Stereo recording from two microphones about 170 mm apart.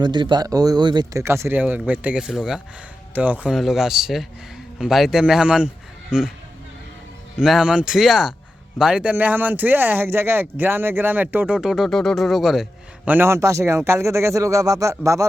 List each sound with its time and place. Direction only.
0.0 s a man's voice: 25° right (ahead or behind); by 6.3 s 5° right (ahead or behind)
7.3 s a man's voice: 5° right (ahead or behind)
13.1 s speech: 15° right (ahead or behind)